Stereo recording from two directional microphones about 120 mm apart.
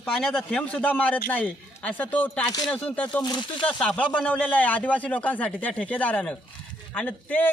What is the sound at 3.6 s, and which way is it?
Speech, 10° left (ahead or behind).